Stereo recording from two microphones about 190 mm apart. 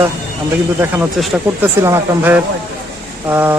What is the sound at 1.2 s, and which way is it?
Speech, 10° right (ahead or behind).